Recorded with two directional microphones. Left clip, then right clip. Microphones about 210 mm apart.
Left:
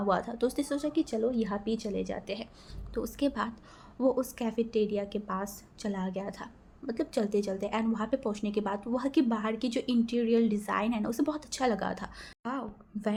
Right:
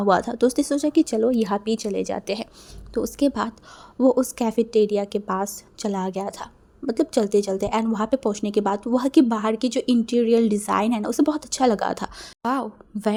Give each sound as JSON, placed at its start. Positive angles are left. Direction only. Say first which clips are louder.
{"t": 0.0, "sound": "a woman's voice", "louder": "right 10 dB", "side_deg": -40}